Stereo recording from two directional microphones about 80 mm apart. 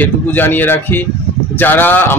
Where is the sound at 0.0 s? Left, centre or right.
Left.